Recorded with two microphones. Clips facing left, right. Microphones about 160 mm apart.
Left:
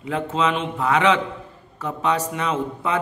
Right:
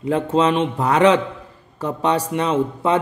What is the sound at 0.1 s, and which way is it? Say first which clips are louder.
Speech: right 5 dB; 35° right (ahead or behind).